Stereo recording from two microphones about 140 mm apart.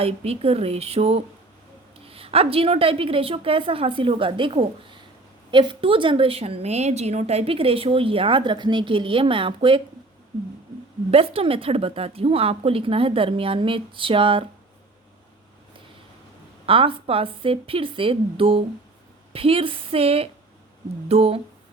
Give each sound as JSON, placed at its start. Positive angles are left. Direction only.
{"t": 0.0, "sound": "speech", "side_deg": -45}
{"t": 11.1, "sound": "speech", "side_deg": -45}
{"t": 16.6, "sound": "speech", "side_deg": -40}